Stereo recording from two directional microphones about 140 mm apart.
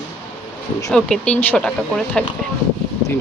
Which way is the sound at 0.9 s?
5° left (ahead or behind).